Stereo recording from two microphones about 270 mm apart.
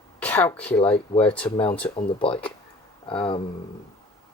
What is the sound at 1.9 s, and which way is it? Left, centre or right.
Speech, centre.